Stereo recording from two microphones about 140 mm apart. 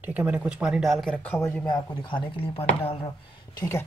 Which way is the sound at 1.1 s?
10° left (ahead or behind).